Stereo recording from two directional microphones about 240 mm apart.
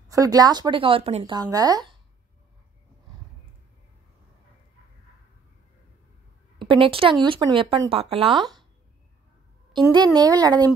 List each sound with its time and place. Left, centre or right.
0.1 s speech: centre
6.6 s speech: right
9.9 s speech: centre